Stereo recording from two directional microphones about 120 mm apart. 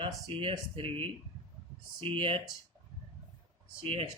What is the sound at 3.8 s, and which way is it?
Speech, 45° right (ahead or behind).